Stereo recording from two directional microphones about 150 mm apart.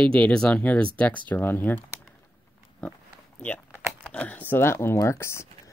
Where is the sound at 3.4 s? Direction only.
10° left (ahead or behind).